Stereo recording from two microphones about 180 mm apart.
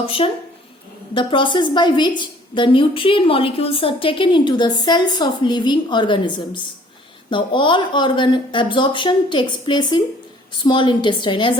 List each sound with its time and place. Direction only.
0.0 s a woman's voice: 30° left (ahead or behind)